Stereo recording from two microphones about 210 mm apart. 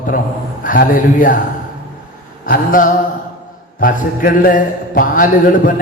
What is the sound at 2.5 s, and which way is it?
A woman's voice, 40° left (ahead or behind).